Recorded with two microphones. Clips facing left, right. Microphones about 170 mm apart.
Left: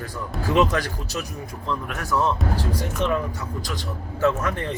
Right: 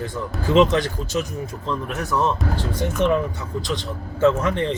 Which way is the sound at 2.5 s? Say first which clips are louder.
Even; 40° left (ahead or behind).